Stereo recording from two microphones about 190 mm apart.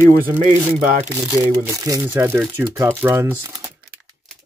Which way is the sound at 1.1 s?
15° right (ahead or behind).